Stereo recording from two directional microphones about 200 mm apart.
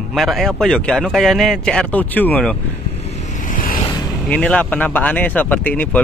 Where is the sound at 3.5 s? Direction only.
45° left (ahead or behind).